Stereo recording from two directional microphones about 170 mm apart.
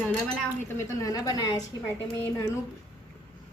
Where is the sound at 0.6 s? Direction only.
20° left (ahead or behind).